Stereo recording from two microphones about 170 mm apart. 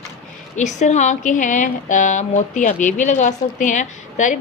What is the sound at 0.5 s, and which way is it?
Speech, 45° left (ahead or behind).